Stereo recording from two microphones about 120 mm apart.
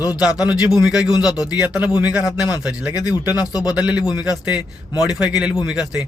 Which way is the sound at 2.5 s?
30° left (ahead or behind).